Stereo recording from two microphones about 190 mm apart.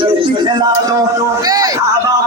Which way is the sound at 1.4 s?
20° right (ahead or behind).